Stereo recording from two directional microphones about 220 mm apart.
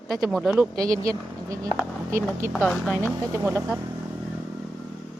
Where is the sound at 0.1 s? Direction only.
Centre (ahead or behind).